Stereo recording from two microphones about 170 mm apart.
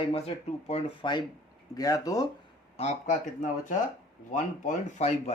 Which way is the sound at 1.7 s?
20° left (ahead or behind).